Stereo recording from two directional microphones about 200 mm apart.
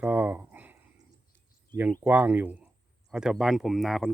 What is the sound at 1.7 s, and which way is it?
Speech, 10° right (ahead or behind).